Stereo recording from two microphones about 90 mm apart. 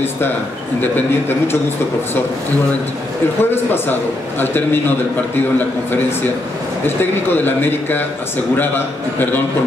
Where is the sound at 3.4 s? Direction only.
25° left (ahead or behind).